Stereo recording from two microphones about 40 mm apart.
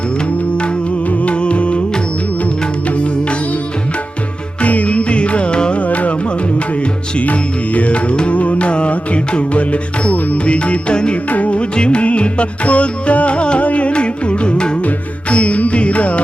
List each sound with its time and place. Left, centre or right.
1.2 s music: left
4.6 s music: left
5.8 s music: left
7.2 s music: left
11.3 s music: left